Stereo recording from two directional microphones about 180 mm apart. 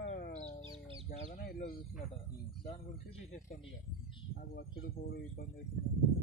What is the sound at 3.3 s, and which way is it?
Speech, 45° left (ahead or behind).